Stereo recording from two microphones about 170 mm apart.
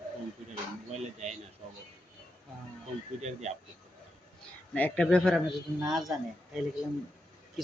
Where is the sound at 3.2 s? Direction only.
40° right (ahead or behind).